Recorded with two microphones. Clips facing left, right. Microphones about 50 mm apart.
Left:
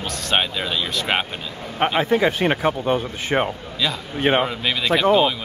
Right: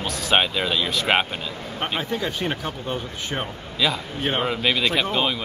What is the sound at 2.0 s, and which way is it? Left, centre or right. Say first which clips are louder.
A man's voice: left 10 dB; left.